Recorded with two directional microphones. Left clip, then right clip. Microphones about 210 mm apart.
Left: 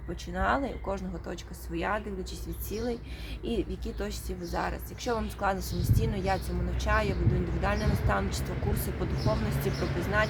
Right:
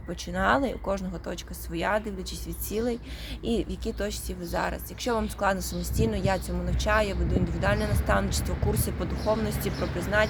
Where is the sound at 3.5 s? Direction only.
35° right (ahead or behind).